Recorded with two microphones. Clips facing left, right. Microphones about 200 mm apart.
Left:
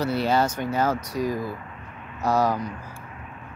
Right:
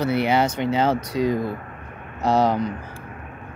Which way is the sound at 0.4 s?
25° right (ahead or behind).